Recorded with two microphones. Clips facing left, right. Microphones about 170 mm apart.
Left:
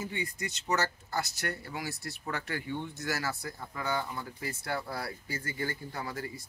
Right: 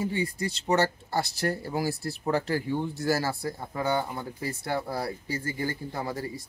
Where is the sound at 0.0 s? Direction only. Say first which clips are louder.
Right 8 dB; 30° right (ahead or behind).